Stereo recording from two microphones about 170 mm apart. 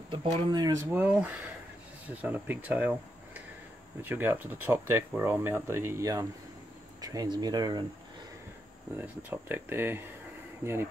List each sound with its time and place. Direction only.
0.1 s speech: 25° right (ahead or behind)
0.9 s speech: 10° right (ahead or behind); by 7.8 s 25° right (ahead or behind)
8.9 s speech: 10° right (ahead or behind)